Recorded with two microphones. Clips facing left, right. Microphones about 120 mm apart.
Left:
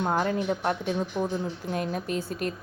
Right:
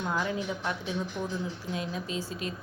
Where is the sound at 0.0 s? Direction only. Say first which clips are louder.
Left 5 dB; 45° left (ahead or behind).